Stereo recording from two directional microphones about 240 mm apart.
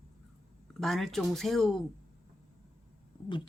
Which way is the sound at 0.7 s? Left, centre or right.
Centre.